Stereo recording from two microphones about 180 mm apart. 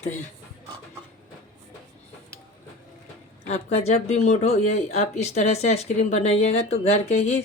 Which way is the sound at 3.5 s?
35° left (ahead or behind).